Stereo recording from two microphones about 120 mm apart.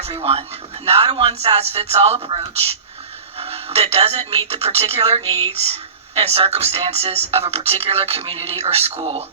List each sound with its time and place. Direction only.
0.0 s speech: 55° right (ahead or behind)